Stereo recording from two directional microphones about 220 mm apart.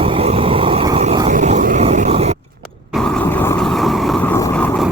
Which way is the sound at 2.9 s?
5° right (ahead or behind).